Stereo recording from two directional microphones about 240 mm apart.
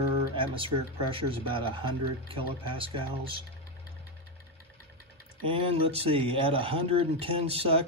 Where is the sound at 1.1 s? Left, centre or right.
Right.